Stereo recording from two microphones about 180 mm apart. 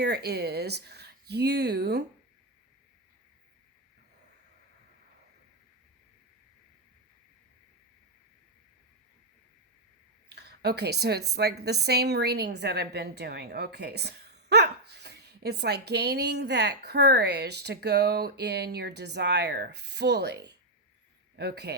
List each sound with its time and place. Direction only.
0.0 s speech: 65° right (ahead or behind)
10.2 s a woman's voice: 65° right (ahead or behind)